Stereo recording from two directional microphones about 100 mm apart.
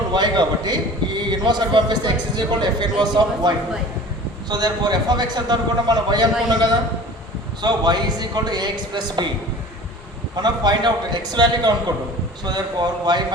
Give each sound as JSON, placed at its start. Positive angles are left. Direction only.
{"t": 0.1, "sound": "a man's voice", "side_deg": -45}
{"t": 10.3, "sound": "a man's voice", "side_deg": -45}